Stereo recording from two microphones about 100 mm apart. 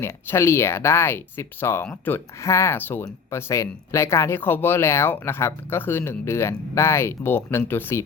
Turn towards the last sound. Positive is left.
turn(degrees=25)  # may be behind; listen again after turning